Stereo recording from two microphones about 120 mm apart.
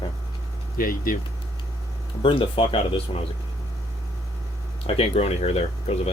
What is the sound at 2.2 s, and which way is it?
Speech, 45° left (ahead or behind).